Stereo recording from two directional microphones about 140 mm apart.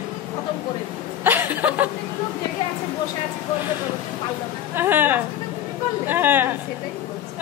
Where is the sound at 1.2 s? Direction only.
15° right (ahead or behind).